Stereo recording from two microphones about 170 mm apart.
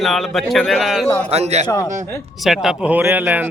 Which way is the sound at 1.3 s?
40° right (ahead or behind).